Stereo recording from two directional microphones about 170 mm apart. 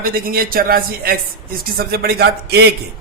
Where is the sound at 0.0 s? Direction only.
60° right (ahead or behind).